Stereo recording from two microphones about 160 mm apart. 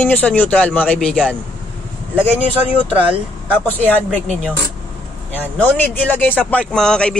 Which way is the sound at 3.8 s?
10° left (ahead or behind).